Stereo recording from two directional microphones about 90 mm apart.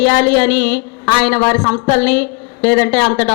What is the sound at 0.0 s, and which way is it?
A woman's voice, 20° left (ahead or behind).